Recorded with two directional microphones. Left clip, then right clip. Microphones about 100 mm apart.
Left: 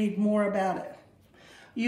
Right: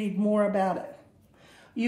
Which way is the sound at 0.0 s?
45° right (ahead or behind).